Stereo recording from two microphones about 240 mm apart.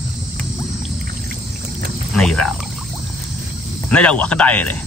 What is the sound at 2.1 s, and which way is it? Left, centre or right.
Speech, centre.